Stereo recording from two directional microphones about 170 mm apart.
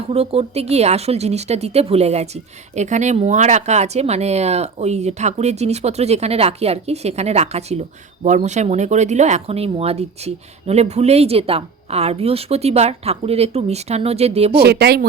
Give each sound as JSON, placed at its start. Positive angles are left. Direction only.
{"t": 0.1, "sound": "a woman's voice", "side_deg": -35}
{"t": 14.5, "sound": "speech", "side_deg": -65}